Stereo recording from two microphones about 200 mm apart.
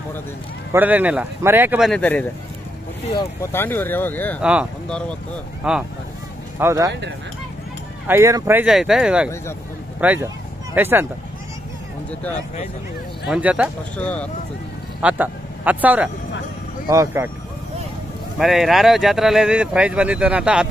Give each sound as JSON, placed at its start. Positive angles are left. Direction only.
{"t": 0.7, "sound": "speech", "side_deg": -10}
{"t": 1.9, "sound": "speech", "side_deg": 5}
{"t": 3.5, "sound": "speech", "side_deg": 10}
{"t": 4.4, "sound": "speech", "side_deg": -5}
{"t": 8.1, "sound": "speech", "side_deg": -15}
{"t": 12.1, "sound": "speech", "side_deg": 5}
{"t": 13.2, "sound": "speech", "side_deg": -5}
{"t": 13.9, "sound": "speech", "side_deg": 5}
{"t": 15.0, "sound": "a man's voice", "side_deg": -5}
{"t": 18.4, "sound": "speech", "side_deg": 0}